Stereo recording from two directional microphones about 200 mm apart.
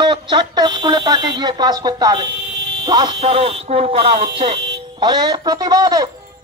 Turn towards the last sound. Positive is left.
turn(degrees=-20)  # may be behind; listen again after turning